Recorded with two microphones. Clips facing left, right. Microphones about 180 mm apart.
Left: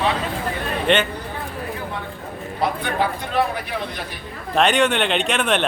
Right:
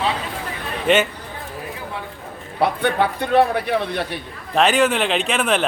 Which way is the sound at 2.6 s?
65° right (ahead or behind).